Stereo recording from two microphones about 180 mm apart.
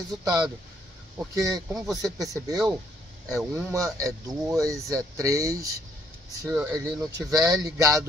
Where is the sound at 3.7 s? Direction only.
15° right (ahead or behind).